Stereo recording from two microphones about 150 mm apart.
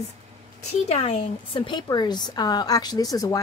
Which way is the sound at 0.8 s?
45° left (ahead or behind).